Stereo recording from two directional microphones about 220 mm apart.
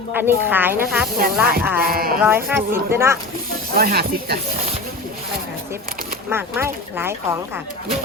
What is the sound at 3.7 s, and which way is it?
Speech, 45° right (ahead or behind).